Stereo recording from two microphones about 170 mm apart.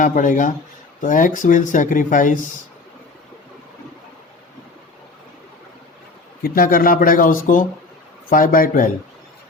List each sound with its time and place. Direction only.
0.0 s speech: 50° left (ahead or behind)
6.4 s speech: 60° left (ahead or behind)